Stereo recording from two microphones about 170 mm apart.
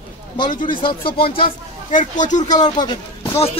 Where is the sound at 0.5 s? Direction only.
50° left (ahead or behind).